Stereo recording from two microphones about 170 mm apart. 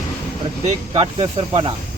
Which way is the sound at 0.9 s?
30° right (ahead or behind).